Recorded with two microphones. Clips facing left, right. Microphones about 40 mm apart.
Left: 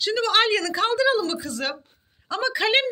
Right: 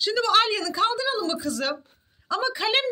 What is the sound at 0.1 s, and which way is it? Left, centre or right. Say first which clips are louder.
A woman's voice: left 1 dB; left.